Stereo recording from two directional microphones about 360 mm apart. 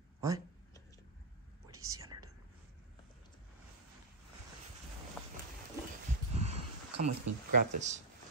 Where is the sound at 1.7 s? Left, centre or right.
Right.